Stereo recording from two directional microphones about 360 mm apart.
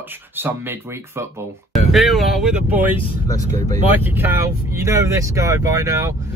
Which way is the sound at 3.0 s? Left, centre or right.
Centre.